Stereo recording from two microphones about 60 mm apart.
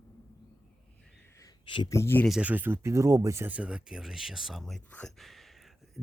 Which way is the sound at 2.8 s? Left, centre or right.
Right.